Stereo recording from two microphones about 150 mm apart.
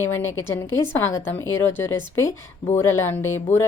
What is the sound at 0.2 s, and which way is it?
A woman's voice, 15° left (ahead or behind).